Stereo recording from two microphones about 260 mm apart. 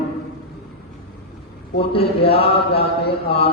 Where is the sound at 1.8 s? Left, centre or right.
Left.